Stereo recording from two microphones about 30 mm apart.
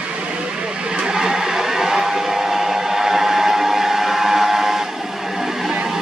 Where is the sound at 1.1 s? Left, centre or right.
Centre.